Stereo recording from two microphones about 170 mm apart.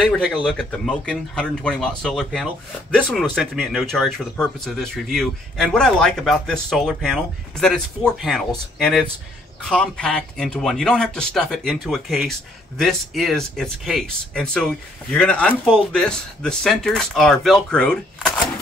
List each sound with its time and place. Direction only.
0.0 s speech: centre (ahead or behind)